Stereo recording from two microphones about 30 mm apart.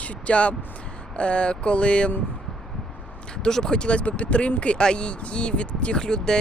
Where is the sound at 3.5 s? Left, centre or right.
Centre.